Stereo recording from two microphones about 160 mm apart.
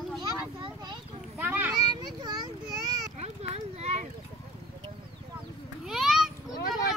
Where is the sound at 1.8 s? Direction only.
25° right (ahead or behind).